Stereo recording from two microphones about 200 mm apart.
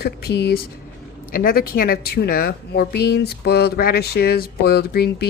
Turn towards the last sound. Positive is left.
turn(degrees=55)  # may be behind; listen again after turning